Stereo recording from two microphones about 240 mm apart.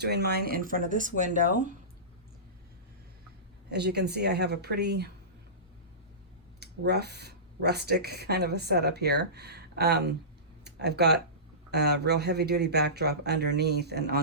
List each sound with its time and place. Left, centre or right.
0.0 s speech: right
3.7 s speech: right
6.6 s speech: right
10.6 s a sound: right
11.7 s speech: right